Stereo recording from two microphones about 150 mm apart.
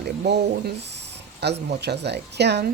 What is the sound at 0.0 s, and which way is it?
Speech, 90° right.